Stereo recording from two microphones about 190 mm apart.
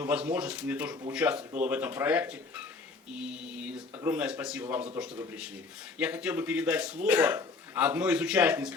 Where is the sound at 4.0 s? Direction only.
5° right (ahead or behind).